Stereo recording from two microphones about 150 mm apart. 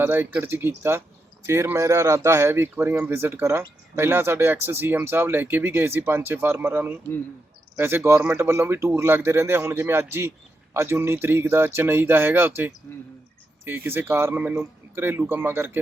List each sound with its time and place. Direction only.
0.0 s a man's voice: 15° right (ahead or behind)